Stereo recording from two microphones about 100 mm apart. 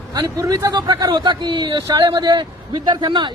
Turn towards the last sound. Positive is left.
turn(degrees=-50)  # may be behind; listen again after turning